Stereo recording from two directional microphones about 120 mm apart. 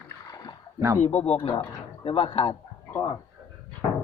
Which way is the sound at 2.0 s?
50° left (ahead or behind).